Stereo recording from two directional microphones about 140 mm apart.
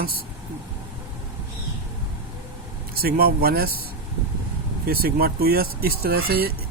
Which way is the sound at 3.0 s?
90° right.